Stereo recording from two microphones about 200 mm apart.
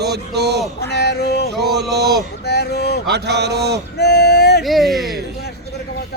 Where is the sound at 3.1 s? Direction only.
55° right (ahead or behind).